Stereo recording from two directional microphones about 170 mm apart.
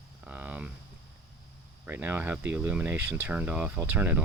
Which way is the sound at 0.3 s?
10° right (ahead or behind).